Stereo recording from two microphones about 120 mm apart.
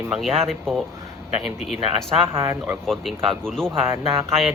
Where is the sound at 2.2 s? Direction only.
20° right (ahead or behind).